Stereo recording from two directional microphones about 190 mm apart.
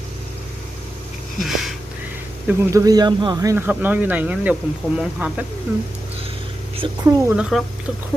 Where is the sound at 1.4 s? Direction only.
Centre (ahead or behind).